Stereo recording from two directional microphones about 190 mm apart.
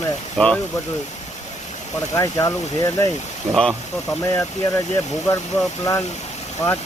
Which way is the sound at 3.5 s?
Centre (ahead or behind).